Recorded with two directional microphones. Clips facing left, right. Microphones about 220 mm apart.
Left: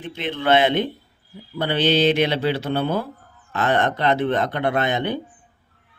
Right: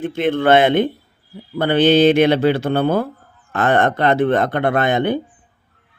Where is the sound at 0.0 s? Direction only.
50° right (ahead or behind).